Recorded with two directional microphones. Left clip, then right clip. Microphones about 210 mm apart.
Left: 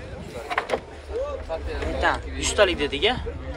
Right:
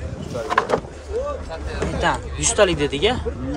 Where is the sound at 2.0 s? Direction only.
15° right (ahead or behind).